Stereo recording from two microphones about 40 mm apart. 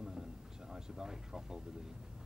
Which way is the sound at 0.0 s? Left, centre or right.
Centre.